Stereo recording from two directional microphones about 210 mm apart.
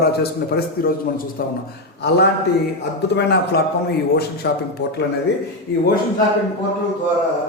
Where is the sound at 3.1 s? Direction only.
50° left (ahead or behind).